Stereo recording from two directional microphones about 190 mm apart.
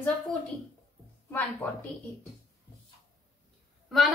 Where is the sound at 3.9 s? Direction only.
Centre (ahead or behind).